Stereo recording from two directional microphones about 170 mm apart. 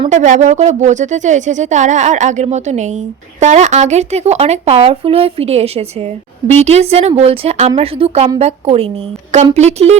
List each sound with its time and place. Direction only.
0.1 s speech: 45° right (ahead or behind)